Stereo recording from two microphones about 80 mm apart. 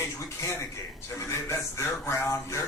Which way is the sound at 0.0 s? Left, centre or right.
Left.